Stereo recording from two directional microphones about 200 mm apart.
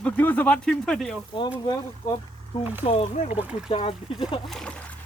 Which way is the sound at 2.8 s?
30° left (ahead or behind).